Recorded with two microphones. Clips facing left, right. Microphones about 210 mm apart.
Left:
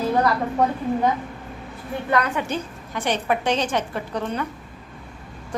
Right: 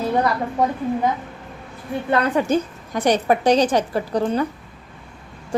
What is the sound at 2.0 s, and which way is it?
A woman's voice, 30° right (ahead or behind).